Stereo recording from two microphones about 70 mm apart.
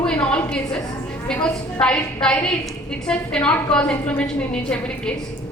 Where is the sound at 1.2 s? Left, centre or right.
Centre.